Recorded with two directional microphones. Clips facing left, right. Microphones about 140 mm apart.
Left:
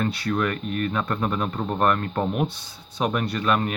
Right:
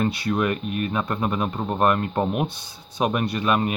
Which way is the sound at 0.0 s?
15° right (ahead or behind).